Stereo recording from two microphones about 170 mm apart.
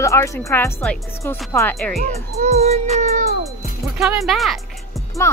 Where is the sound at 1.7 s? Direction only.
Centre (ahead or behind).